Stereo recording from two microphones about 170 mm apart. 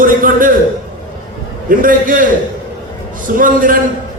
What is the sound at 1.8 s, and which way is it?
Speech, 55° right (ahead or behind).